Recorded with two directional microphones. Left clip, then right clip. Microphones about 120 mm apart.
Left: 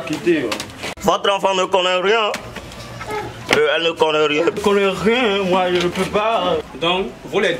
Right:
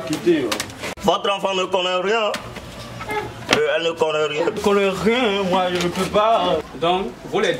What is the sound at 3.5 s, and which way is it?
A man's voice, 15° left (ahead or behind).